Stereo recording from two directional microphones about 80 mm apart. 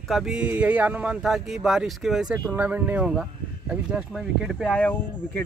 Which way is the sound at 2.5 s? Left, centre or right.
Right.